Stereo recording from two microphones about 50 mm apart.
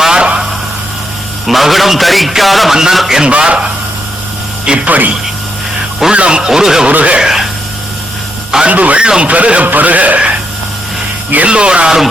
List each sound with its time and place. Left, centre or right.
0.0 s a sound: centre
1.5 s a man's voice: centre
3.2 s speech: right
4.9 s speech: right
6.1 s speech: right
6.8 s speech: right
7.2 s speech: centre
8.6 s speech: right
11.4 s speech: right